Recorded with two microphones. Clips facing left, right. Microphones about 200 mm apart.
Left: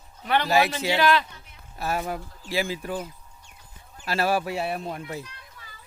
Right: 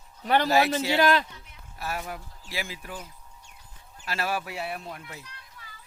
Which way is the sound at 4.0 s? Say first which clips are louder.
Left 6 dB; 30° left (ahead or behind).